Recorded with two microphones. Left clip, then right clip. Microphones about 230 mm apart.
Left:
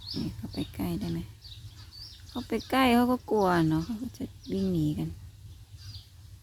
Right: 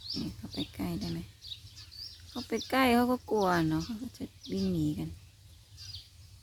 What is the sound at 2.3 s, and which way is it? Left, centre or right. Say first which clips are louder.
Speech: left 2 dB; centre.